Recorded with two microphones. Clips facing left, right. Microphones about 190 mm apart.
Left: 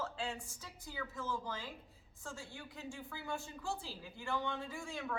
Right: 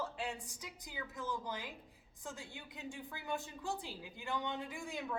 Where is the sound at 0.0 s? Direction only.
15° right (ahead or behind).